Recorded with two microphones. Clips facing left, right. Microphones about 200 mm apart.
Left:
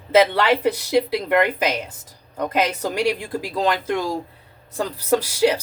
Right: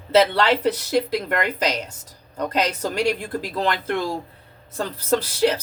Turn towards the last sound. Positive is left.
turn(degrees=15)  # may be behind; listen again after turning